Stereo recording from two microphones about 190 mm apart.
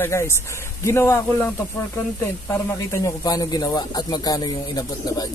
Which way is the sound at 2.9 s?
20° left (ahead or behind).